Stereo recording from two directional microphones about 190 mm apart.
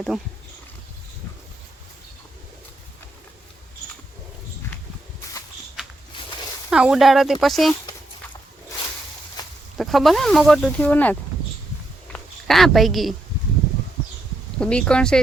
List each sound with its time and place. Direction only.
6.7 s speech: 5° right (ahead or behind)
9.7 s speech: centre (ahead or behind)
12.1 s a sound: centre (ahead or behind)
14.6 s speech: 5° left (ahead or behind)